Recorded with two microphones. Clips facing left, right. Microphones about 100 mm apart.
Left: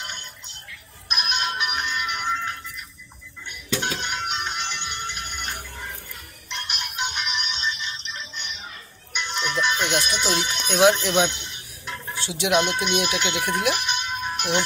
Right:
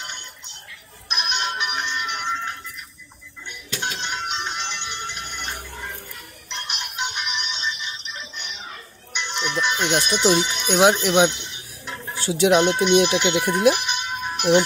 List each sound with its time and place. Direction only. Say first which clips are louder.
1.0 s music: right 1 dB; 25° right (ahead or behind)
3.8 s music: even; 25° right (ahead or behind)
5.1 s a sound: right 1 dB; 20° right (ahead or behind)
6.5 s music: even; 25° right (ahead or behind)
10.1 s speech: right 6 dB; 20° right (ahead or behind)
12.2 s speech: right 5 dB; 35° right (ahead or behind); by 14.6 s 15° right (ahead or behind)